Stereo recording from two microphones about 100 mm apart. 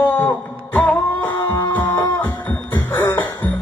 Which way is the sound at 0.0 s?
20° left (ahead or behind).